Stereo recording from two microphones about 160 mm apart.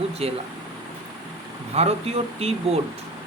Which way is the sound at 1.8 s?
40° right (ahead or behind).